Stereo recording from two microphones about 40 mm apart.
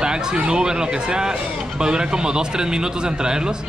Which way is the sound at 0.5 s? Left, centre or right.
Right.